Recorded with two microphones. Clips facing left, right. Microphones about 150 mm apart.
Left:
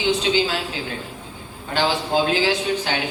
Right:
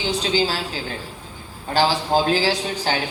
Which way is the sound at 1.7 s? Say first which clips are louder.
Right 2 dB; 35° right (ahead or behind).